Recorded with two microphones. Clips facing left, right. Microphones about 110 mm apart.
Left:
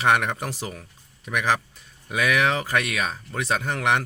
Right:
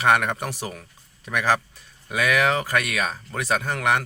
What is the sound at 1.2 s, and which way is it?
Speech, 20° left (ahead or behind).